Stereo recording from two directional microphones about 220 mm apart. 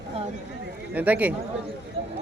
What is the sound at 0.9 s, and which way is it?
Speech, 5° right (ahead or behind).